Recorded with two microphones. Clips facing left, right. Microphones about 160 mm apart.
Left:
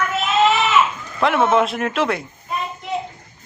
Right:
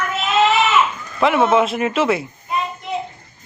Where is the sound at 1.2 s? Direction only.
5° right (ahead or behind).